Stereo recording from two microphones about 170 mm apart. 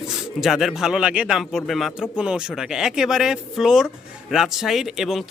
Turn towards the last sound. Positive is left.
turn(degrees=0)  # may be behind; listen again after turning